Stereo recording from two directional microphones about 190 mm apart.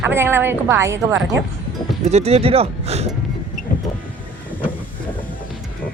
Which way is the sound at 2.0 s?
35° right (ahead or behind).